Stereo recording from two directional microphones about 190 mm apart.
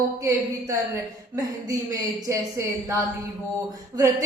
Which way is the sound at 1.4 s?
20° right (ahead or behind).